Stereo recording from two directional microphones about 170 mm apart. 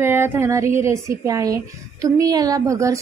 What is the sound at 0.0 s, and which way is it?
Speech, 15° right (ahead or behind).